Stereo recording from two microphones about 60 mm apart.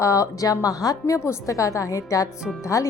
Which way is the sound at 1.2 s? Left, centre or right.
Left.